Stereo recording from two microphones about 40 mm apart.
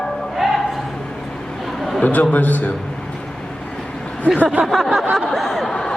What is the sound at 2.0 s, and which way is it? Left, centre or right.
Speech, left.